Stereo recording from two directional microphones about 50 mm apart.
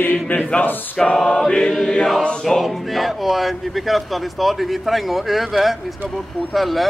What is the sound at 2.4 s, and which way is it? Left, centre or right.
Speech, centre.